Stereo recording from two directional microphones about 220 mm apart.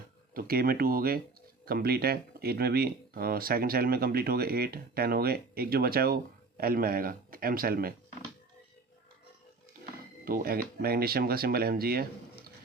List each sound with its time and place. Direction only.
0.3 s speech: 45° right (ahead or behind)
10.2 s speech: 40° right (ahead or behind)